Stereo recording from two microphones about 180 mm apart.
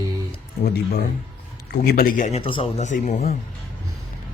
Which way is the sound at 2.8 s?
45° left (ahead or behind).